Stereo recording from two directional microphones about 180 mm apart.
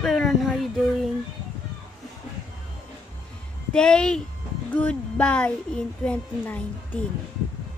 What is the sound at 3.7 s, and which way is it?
A woman's voice, 5° left (ahead or behind).